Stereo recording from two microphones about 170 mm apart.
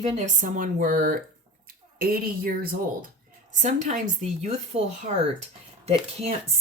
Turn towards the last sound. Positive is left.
turn(degrees=-40)  # may be behind; listen again after turning